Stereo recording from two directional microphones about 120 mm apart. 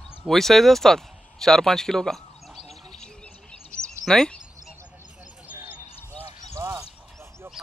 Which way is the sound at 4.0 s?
5° left (ahead or behind).